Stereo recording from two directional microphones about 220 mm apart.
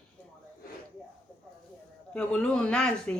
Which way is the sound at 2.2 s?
5° left (ahead or behind).